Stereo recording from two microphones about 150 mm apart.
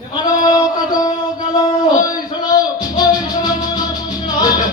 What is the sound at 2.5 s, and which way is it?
Music, 25° left (ahead or behind).